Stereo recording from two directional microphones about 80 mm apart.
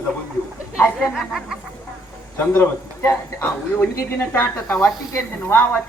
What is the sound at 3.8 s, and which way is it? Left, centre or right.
Speech, left.